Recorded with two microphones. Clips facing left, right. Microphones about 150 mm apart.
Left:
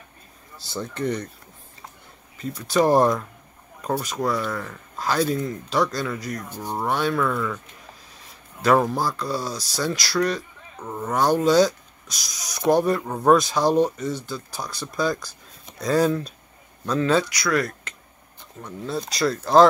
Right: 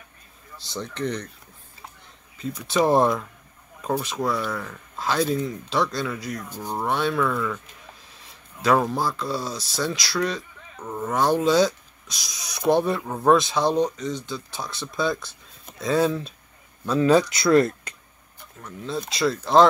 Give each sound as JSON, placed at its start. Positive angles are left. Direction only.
{"t": 0.7, "sound": "speech", "side_deg": 10}
{"t": 2.4, "sound": "speech", "side_deg": 0}
{"t": 8.6, "sound": "speech", "side_deg": 0}
{"t": 17.0, "sound": "speech", "side_deg": -20}
{"t": 18.6, "sound": "speech", "side_deg": 10}
{"t": 18.9, "sound": "speech", "side_deg": 0}